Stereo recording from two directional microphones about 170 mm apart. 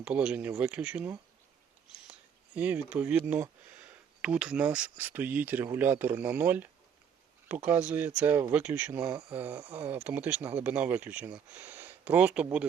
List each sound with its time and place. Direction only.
0.0 s speech: 5° right (ahead or behind)
2.6 s speech: 10° right (ahead or behind)